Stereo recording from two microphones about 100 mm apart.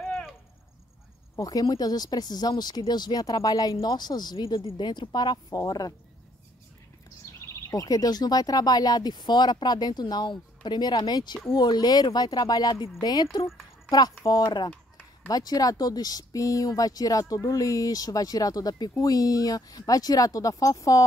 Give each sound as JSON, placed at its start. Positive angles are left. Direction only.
{"t": 1.3, "sound": "speech", "side_deg": 35}
{"t": 4.6, "sound": "speech", "side_deg": 60}
{"t": 4.8, "sound": "speech", "side_deg": 45}
{"t": 7.4, "sound": "speech", "side_deg": 30}